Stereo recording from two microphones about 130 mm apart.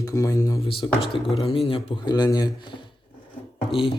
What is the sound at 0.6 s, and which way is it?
Speech, 45° left (ahead or behind).